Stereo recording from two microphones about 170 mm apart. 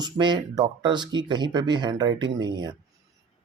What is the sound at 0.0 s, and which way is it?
Speech, 25° right (ahead or behind).